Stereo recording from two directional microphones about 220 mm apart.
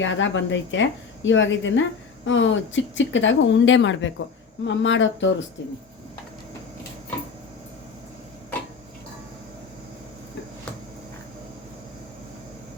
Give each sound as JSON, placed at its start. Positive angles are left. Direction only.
{"t": 0.0, "sound": "a woman's voice", "side_deg": 55}